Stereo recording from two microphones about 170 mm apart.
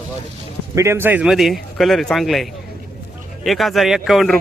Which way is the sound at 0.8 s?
15° right (ahead or behind).